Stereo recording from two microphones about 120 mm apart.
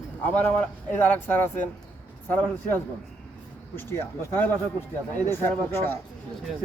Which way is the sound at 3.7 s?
20° left (ahead or behind).